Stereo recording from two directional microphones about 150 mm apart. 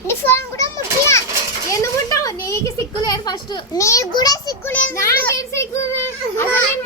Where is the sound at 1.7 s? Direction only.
20° left (ahead or behind).